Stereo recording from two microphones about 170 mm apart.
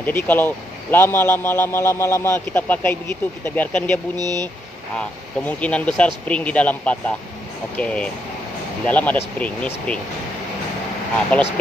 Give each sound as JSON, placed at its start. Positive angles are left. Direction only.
{"t": 0.0, "sound": "a man's voice", "side_deg": 10}
{"t": 4.2, "sound": "speech", "side_deg": -20}
{"t": 4.9, "sound": "a man's voice", "side_deg": 10}
{"t": 11.3, "sound": "a man's voice", "side_deg": 10}